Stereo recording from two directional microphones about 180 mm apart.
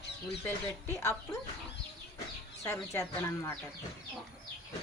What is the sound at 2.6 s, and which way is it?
Speech, 15° left (ahead or behind).